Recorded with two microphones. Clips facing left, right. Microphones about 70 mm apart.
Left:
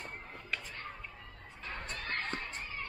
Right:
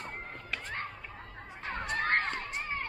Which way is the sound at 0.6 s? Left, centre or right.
Right.